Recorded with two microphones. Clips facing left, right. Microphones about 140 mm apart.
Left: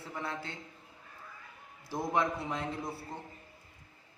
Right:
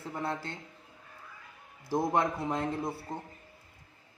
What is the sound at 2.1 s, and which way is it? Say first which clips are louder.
Speech: left 2 dB; 40° right (ahead or behind).